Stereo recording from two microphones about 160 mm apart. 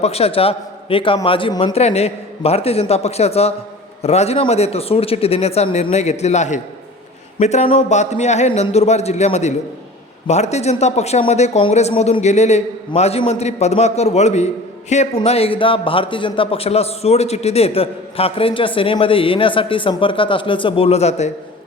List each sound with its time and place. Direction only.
0.0 s speech: 40° left (ahead or behind)